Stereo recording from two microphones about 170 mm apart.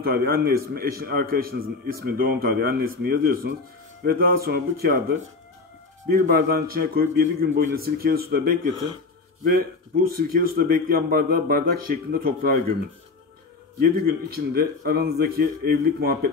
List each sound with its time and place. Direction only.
0.0 s a man's voice: 60° right (ahead or behind)
13.7 s a man's voice: 60° right (ahead or behind)